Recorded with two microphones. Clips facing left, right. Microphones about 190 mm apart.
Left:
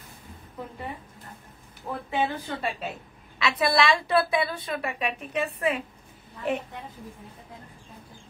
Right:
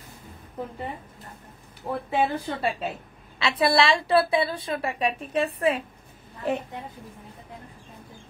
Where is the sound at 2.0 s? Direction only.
35° right (ahead or behind).